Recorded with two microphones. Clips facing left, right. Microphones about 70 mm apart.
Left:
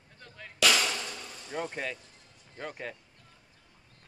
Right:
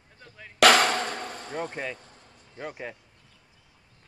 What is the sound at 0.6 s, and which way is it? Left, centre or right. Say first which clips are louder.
Drum: right 9 dB; right.